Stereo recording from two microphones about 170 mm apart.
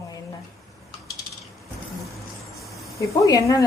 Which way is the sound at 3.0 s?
20° left (ahead or behind).